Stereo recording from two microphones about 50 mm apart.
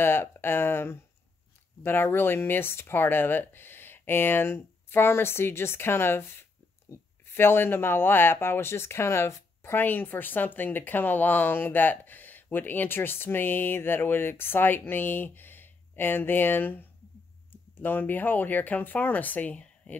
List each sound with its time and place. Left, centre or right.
0.0 s speech: left
9.8 s speech: left